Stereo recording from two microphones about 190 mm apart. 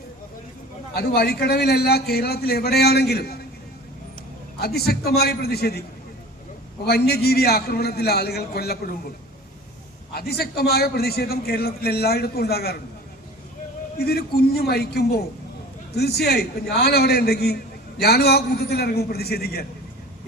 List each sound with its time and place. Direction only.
0.9 s a man's voice: 55° left (ahead or behind)
4.6 s a man's voice: 55° left (ahead or behind)
6.8 s a man's voice: 55° left (ahead or behind)
10.2 s a man's voice: 55° left (ahead or behind)
14.0 s a man's voice: 55° left (ahead or behind)